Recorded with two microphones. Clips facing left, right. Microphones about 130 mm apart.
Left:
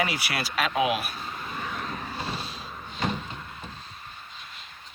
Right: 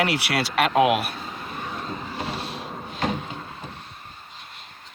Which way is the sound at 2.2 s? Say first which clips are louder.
Right 4 dB; 70° right (ahead or behind).